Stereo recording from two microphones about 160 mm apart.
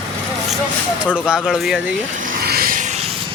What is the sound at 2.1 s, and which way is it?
Vehicle, 60° right (ahead or behind).